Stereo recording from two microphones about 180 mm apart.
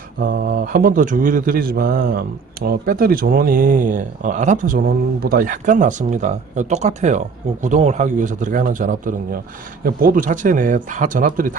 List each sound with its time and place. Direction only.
0.2 s a man's voice: 50° right (ahead or behind)